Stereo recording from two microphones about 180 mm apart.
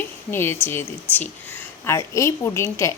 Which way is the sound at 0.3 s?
15° left (ahead or behind).